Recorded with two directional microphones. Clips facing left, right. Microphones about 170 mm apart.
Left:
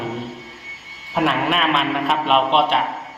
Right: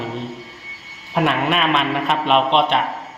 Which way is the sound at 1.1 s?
Centre (ahead or behind).